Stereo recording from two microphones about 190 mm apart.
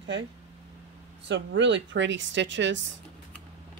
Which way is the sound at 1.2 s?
70° right (ahead or behind).